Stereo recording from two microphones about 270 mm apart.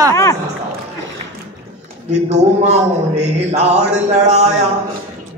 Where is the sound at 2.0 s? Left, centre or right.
Right.